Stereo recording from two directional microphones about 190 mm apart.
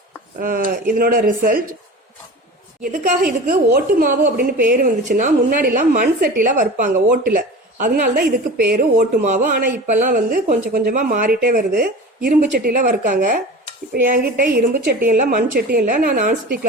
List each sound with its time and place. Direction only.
0.3 s a woman's voice: 45° right (ahead or behind)
2.8 s a woman's voice: 45° right (ahead or behind)